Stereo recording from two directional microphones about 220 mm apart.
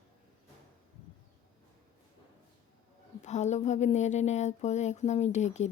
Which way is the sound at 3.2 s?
30° left (ahead or behind).